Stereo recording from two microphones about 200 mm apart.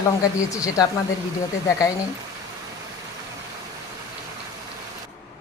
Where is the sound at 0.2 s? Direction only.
15° left (ahead or behind).